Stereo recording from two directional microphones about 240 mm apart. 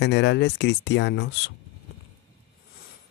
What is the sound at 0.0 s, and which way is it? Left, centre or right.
Speech, left.